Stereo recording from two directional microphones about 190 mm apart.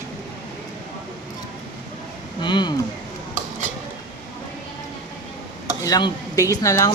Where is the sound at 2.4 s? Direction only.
25° left (ahead or behind).